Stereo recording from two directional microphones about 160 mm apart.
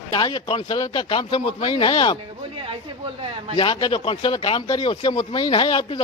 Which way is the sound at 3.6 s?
30° left (ahead or behind).